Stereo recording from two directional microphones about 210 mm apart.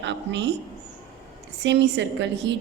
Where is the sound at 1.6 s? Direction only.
55° right (ahead or behind).